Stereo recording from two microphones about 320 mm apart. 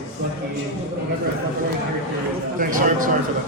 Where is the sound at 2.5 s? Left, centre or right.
Right.